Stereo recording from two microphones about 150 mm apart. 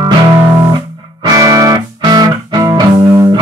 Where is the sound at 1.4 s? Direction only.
25° right (ahead or behind).